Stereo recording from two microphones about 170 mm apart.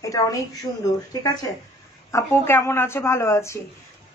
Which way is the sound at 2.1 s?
15° left (ahead or behind).